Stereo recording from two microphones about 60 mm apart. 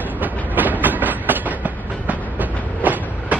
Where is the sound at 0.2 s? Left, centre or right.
Right.